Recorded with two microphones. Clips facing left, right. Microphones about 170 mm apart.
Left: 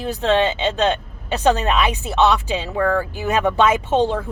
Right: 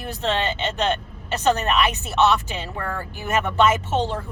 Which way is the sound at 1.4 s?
15° left (ahead or behind).